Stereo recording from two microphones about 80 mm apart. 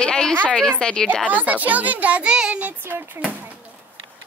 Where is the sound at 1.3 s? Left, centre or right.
Centre.